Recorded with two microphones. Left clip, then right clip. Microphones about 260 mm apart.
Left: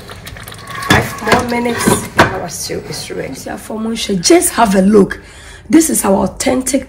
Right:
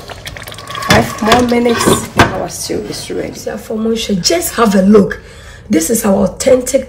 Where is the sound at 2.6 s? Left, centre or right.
Right.